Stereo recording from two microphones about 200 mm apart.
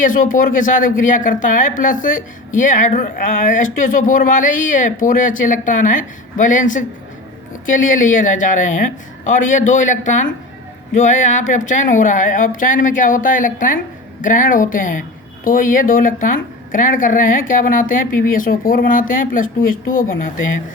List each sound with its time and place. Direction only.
0.0 s speech: 40° left (ahead or behind)